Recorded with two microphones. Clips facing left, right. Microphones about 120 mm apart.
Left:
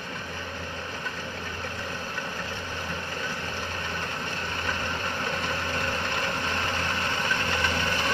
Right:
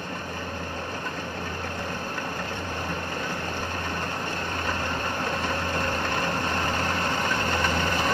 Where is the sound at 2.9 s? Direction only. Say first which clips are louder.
Right 3 dB; 45° right (ahead or behind).